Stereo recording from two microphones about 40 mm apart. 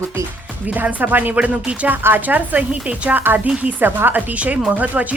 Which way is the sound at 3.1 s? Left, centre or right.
Right.